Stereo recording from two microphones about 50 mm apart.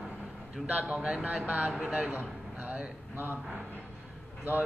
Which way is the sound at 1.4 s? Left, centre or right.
Right.